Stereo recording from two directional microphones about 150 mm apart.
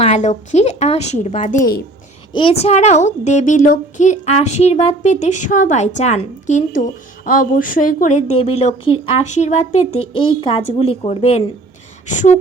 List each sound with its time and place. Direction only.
0.0 s a woman's voice: 50° left (ahead or behind); by 1.8 s 65° left (ahead or behind)
2.3 s a woman's voice: 40° left (ahead or behind); by 8.2 s 60° left (ahead or behind)
8.4 s a woman's voice: 40° left (ahead or behind)
10.4 s a woman's voice: 40° left (ahead or behind)
12.1 s speech: 55° left (ahead or behind)